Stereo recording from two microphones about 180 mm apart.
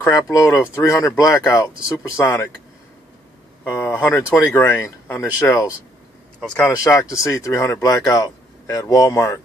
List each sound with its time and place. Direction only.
0.0 s speech: 20° left (ahead or behind)
3.6 s speech: 10° left (ahead or behind)
6.8 s speech: 20° left (ahead or behind)